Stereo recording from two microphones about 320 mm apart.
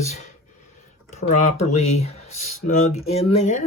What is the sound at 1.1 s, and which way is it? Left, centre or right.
Speech, left.